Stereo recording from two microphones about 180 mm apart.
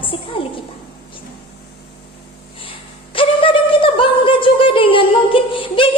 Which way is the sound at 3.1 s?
30° left (ahead or behind).